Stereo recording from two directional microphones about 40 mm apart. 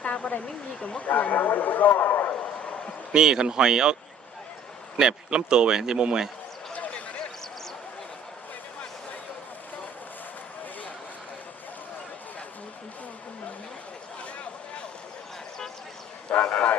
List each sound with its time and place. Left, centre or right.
0.0 s speech: left
3.1 s speech: centre
4.9 s a man's voice: right
16.5 s vehicle: left